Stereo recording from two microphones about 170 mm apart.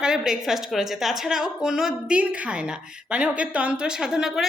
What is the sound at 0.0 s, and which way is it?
A woman's voice, 5° right (ahead or behind).